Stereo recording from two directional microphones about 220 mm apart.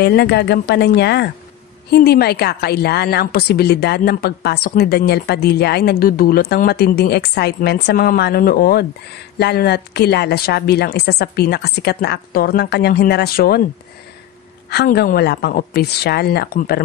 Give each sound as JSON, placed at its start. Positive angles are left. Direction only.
{"t": 0.0, "sound": "a woman's voice", "side_deg": 50}
{"t": 14.7, "sound": "a woman's voice", "side_deg": 50}